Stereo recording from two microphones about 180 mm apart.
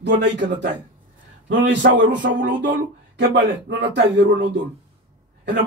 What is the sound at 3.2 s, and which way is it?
Speech, 75° right (ahead or behind).